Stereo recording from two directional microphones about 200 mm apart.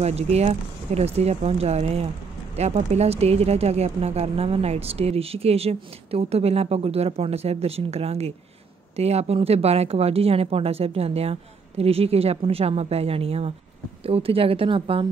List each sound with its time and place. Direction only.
0.0 s a woman's voice: 30° right (ahead or behind)